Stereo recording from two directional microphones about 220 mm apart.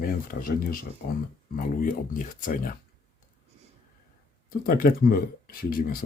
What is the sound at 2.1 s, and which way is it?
Speech, 40° left (ahead or behind).